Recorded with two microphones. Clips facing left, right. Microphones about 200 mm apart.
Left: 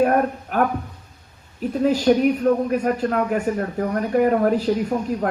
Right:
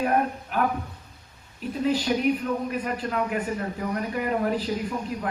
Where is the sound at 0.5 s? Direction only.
45° left (ahead or behind).